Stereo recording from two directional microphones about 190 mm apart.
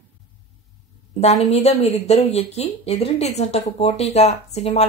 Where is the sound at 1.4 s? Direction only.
35° left (ahead or behind).